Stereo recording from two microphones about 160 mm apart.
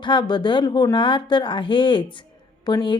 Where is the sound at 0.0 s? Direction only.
30° left (ahead or behind).